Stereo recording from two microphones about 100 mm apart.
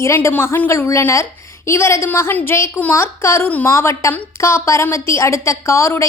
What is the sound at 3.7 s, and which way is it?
A woman's voice, 25° left (ahead or behind).